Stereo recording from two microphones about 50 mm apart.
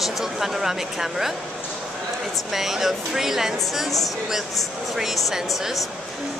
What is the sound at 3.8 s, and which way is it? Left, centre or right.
Speech, centre.